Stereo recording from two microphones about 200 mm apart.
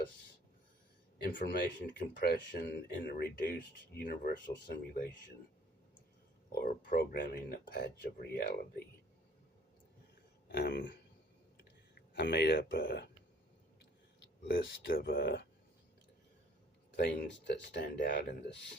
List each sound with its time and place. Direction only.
1.3 s speech: 45° left (ahead or behind)
6.5 s speech: 50° left (ahead or behind)
10.5 s speech: 50° left (ahead or behind)
12.1 s speech: 55° left (ahead or behind)
14.2 s speech: 60° left (ahead or behind)
17.0 s speech: 55° left (ahead or behind)